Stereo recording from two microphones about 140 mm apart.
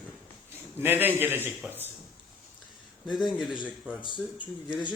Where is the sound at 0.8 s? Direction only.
15° right (ahead or behind).